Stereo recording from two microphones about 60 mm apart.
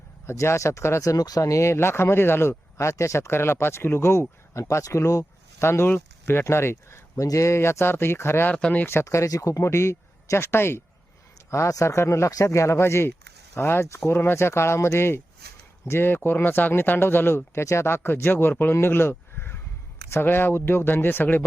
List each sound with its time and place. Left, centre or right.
0.3 s speech: left
1.0 s speech: left
1.7 s speech: left
7.2 s speech: left
8.5 s speech: left
9.0 s speech: left
11.7 s speech: left